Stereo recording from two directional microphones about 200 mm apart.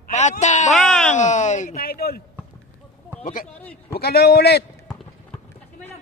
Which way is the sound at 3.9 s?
50° left (ahead or behind).